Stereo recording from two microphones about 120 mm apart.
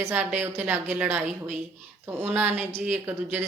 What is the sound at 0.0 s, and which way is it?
A woman's voice, 20° right (ahead or behind).